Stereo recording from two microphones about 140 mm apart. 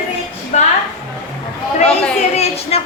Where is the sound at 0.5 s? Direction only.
60° left (ahead or behind).